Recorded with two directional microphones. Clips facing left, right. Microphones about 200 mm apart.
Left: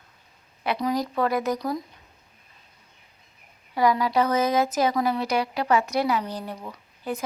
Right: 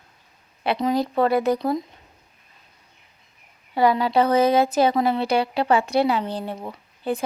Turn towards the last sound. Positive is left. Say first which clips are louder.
# right 5 dB
turn(degrees=-30)  # may be behind; listen again after turning